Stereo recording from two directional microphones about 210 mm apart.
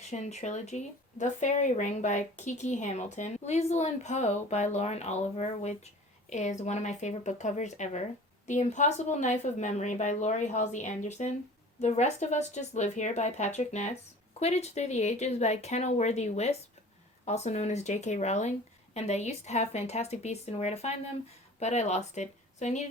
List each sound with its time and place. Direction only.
0.0 s speech: 35° left (ahead or behind)